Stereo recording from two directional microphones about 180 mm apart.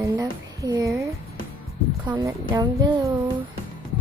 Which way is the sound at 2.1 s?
20° right (ahead or behind).